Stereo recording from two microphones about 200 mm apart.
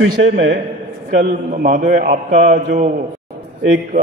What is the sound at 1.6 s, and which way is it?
A man's voice, 45° right (ahead or behind).